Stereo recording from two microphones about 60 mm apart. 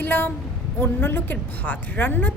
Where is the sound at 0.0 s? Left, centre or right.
Left.